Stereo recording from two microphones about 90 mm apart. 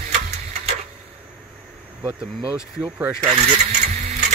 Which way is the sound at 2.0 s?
15° right (ahead or behind).